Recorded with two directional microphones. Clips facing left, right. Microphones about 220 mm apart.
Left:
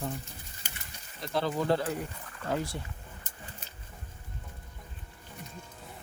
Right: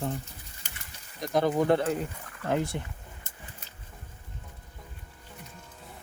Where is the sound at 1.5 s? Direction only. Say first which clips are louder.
Right 3 dB; 55° right (ahead or behind).